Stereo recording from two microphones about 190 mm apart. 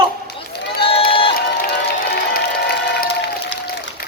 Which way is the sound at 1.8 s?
55° left (ahead or behind).